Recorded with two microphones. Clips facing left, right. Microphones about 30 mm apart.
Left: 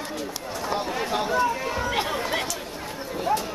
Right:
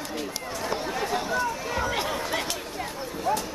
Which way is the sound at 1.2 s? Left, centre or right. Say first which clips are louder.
Left 4 dB; centre.